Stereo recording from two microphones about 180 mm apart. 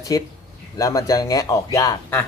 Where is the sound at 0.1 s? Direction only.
20° left (ahead or behind).